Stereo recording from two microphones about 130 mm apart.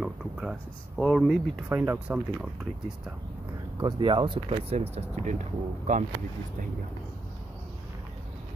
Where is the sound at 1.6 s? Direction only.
15° right (ahead or behind).